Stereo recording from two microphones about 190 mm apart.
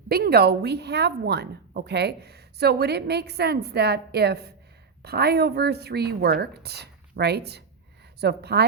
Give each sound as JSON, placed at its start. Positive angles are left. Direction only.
{"t": 0.1, "sound": "a woman's voice", "side_deg": -55}